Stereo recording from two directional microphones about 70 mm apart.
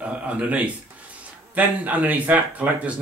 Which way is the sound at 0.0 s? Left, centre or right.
Centre.